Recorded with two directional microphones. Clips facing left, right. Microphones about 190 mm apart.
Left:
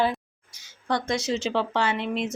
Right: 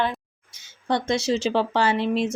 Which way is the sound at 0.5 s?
25° right (ahead or behind).